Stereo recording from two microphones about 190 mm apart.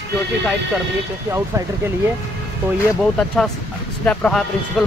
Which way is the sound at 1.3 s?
15° right (ahead or behind).